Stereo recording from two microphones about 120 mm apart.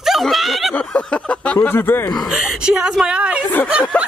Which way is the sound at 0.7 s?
10° left (ahead or behind).